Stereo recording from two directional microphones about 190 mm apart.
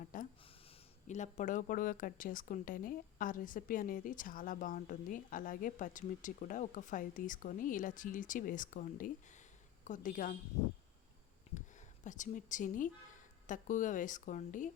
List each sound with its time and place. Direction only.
0.0 s a sound: 45° left (ahead or behind)
1.0 s speech: 40° left (ahead or behind)
12.0 s speech: 40° left (ahead or behind)